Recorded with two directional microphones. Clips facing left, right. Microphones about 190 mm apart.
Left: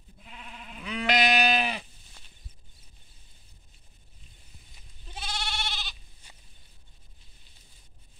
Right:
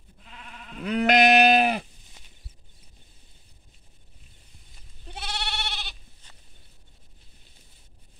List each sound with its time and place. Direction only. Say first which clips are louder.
0.8 s sheep: right 7 dB; 50° right (ahead or behind)
5.0 s sheep: right 2 dB; 65° right (ahead or behind)
6.2 s a sound: left 1 dB; 10° left (ahead or behind)